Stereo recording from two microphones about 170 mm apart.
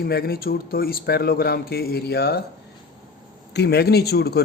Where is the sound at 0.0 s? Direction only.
65° left (ahead or behind).